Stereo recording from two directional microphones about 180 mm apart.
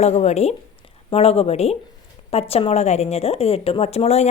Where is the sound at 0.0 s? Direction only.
40° left (ahead or behind).